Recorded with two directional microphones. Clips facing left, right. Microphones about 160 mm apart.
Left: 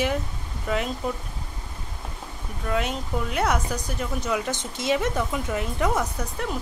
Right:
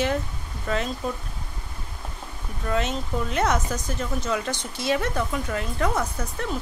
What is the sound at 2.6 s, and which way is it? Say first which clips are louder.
Speech: right 1 dB; 10° left (ahead or behind).